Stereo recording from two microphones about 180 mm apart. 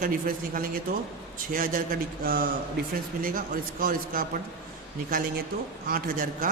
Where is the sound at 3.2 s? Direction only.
50° right (ahead or behind).